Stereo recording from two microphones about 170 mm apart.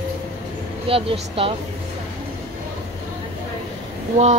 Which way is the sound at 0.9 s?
35° right (ahead or behind).